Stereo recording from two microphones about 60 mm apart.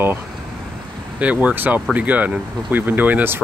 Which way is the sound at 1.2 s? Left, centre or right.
Right.